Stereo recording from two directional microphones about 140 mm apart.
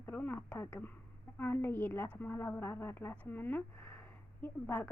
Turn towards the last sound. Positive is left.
turn(degrees=15)  # may be behind; listen again after turning